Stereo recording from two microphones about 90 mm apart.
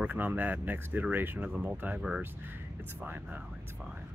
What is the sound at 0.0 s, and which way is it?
Speech, 20° right (ahead or behind).